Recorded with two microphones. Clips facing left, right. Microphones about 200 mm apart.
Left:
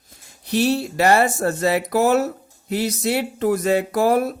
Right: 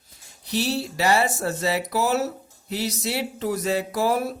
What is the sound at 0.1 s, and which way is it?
Speech, 50° left (ahead or behind).